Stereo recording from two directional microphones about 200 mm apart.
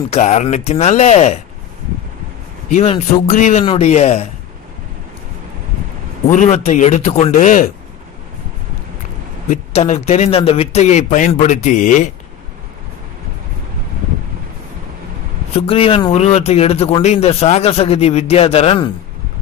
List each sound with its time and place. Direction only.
0.1 s speech: 35° left (ahead or behind)
2.7 s speech: 35° left (ahead or behind)
6.3 s speech: 35° left (ahead or behind)
9.5 s speech: 35° left (ahead or behind)
15.5 s speech: 30° left (ahead or behind)